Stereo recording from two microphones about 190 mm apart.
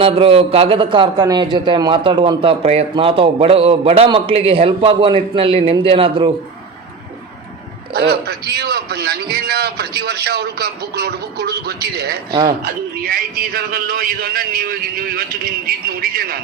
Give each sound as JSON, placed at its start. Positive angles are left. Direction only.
{"t": 0.0, "sound": "a man's voice", "side_deg": -30}
{"t": 7.9, "sound": "a man's voice", "side_deg": -55}